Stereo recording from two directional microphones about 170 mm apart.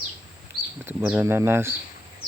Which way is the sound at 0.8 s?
10° right (ahead or behind).